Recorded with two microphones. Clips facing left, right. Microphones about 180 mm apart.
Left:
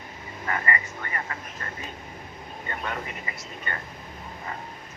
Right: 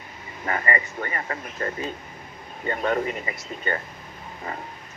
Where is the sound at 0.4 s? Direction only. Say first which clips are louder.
Right 3 dB; 30° right (ahead or behind).